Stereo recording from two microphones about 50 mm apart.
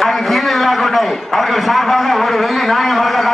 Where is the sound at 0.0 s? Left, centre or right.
Centre.